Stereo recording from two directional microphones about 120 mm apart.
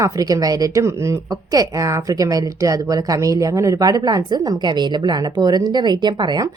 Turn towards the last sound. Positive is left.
turn(degrees=-35)  # may be behind; listen again after turning